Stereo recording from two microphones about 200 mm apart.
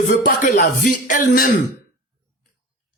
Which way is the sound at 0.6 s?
40° left (ahead or behind).